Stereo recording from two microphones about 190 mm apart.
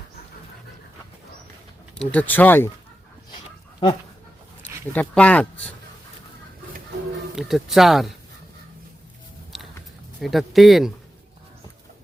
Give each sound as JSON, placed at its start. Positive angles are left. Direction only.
{"t": 2.0, "sound": "speech", "side_deg": 10}
{"t": 3.8, "sound": "dog", "side_deg": 30}
{"t": 4.6, "sound": "speech", "side_deg": 10}
{"t": 7.3, "sound": "speech", "side_deg": 0}
{"t": 10.2, "sound": "speech", "side_deg": 0}